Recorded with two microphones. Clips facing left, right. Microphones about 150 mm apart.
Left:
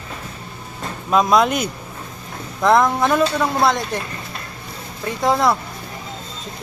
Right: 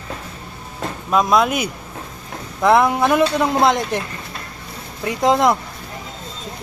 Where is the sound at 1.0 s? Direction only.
Centre (ahead or behind).